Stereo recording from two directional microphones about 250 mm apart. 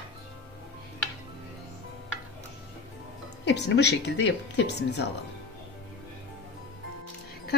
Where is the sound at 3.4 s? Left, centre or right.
Left.